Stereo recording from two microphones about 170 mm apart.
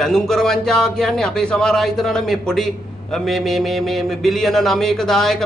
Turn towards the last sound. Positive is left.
turn(degrees=0)  # may be behind; listen again after turning